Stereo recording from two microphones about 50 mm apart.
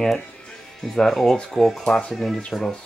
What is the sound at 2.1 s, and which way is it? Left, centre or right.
Speech, centre.